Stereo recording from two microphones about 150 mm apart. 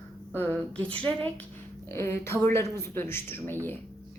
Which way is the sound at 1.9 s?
15° left (ahead or behind).